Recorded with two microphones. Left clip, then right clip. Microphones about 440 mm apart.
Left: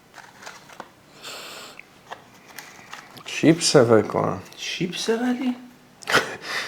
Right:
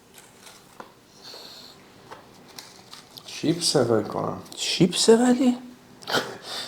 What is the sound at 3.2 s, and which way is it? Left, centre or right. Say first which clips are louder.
Speech: left 6 dB; left.